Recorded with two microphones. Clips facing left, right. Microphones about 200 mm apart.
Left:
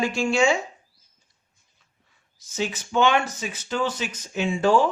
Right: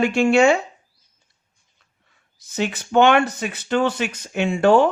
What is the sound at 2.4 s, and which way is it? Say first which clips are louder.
Speech: right 4 dB; 60° right (ahead or behind).